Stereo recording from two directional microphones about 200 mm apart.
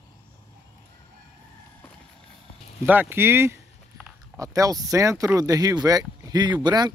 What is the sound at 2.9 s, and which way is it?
Speech, 10° right (ahead or behind).